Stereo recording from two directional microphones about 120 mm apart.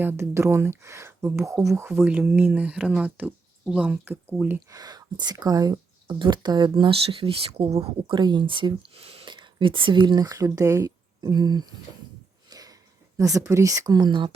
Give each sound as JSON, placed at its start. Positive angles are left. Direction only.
{"t": 0.0, "sound": "speech", "side_deg": -20}
{"t": 4.7, "sound": "speech", "side_deg": -35}
{"t": 8.2, "sound": "speech", "side_deg": -40}
{"t": 12.5, "sound": "a sound", "side_deg": -30}
{"t": 13.1, "sound": "speech", "side_deg": -25}